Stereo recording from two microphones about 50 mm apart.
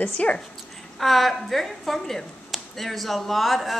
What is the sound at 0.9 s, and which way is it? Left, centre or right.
Speech, centre.